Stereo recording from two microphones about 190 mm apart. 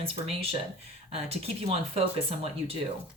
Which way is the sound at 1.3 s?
30° right (ahead or behind).